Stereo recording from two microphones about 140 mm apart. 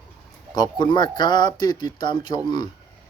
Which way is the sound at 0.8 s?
35° left (ahead or behind).